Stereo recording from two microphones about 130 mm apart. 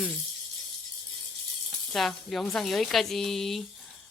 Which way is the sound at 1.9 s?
Centre (ahead or behind).